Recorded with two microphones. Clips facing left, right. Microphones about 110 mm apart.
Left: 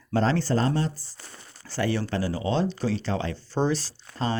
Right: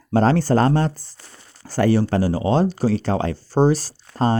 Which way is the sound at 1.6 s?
45° right (ahead or behind).